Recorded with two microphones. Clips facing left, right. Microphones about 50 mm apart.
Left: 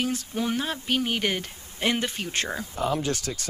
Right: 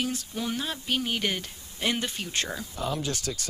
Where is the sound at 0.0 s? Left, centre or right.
Left.